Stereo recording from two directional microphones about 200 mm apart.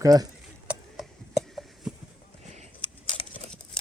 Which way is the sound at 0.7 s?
Centre (ahead or behind).